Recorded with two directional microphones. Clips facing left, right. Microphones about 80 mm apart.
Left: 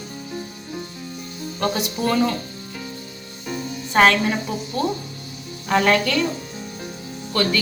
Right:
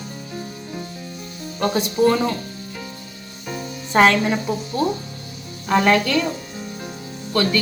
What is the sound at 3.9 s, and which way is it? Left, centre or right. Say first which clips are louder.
Speech: right 1 dB; centre.